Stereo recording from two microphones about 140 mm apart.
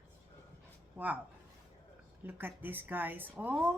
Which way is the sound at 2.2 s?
15° right (ahead or behind).